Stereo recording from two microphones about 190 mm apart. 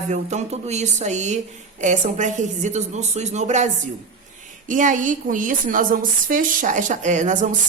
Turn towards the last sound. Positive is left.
turn(degrees=-40)  # may be behind; listen again after turning